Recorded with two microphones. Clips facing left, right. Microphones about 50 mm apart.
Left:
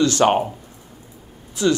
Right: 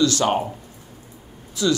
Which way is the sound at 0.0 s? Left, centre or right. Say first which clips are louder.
Left 3 dB; left.